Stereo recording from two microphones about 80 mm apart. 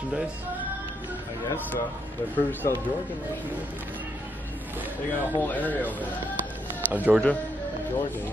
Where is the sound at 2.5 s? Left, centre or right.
Left.